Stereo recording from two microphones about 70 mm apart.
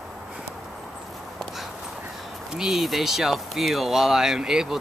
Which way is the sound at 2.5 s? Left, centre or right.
Centre.